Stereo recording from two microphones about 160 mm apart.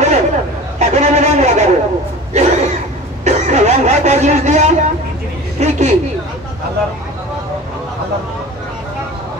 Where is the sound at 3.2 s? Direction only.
45° right (ahead or behind).